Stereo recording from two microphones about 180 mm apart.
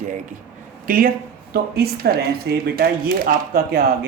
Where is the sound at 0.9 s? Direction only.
55° right (ahead or behind).